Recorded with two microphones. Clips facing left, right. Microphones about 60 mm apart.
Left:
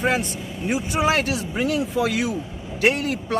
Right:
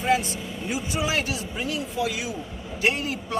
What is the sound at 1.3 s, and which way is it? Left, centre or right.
A man's voice, left.